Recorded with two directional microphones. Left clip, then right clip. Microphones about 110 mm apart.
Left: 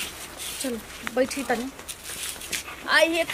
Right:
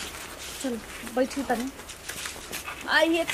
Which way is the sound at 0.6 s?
15° left (ahead or behind).